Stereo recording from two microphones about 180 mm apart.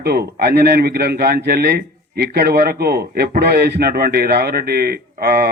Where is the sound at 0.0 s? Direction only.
60° right (ahead or behind).